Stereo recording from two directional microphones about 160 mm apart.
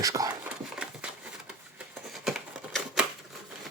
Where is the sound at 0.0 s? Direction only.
20° right (ahead or behind).